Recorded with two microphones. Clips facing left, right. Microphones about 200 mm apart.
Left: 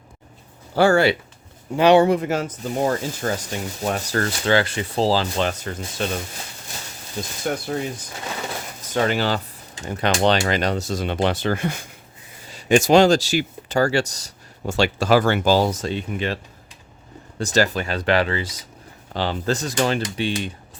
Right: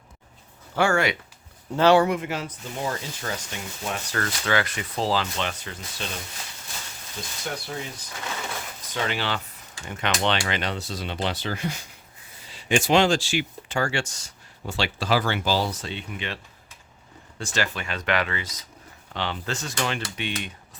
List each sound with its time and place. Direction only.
0.7 s speech: 35° left (ahead or behind)
1.7 s speech: 15° left (ahead or behind)
2.0 s speech: 40° left (ahead or behind)
7.4 s speech: 50° left (ahead or behind)
8.9 s speech: 45° left (ahead or behind)
17.4 s speech: 40° left (ahead or behind)